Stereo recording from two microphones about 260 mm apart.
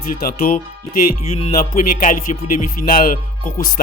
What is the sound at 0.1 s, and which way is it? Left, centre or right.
Speech, left.